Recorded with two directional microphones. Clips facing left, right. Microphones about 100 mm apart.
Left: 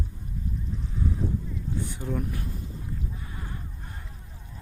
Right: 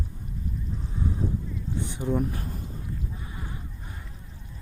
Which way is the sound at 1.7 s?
20° right (ahead or behind).